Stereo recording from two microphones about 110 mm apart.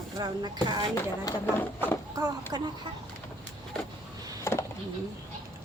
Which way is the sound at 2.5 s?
40° right (ahead or behind).